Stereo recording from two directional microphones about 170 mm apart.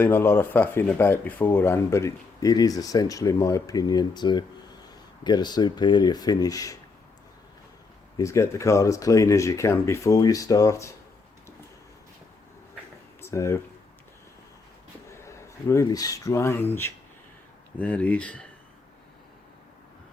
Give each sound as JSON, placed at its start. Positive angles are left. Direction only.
{"t": 0.0, "sound": "speech", "side_deg": 15}
{"t": 8.2, "sound": "speech", "side_deg": 15}
{"t": 13.2, "sound": "speech", "side_deg": 15}
{"t": 15.2, "sound": "speech", "side_deg": 15}